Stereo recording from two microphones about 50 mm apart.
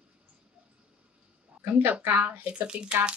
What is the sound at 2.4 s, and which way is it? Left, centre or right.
Speech, right.